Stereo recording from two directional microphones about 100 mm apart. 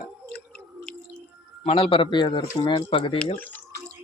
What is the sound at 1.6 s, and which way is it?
Speech, 75° left (ahead or behind).